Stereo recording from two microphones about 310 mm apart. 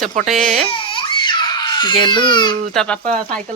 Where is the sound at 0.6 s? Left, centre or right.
Centre.